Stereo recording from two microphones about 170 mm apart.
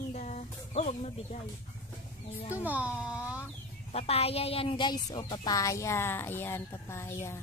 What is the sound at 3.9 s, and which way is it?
Speech, 35° left (ahead or behind).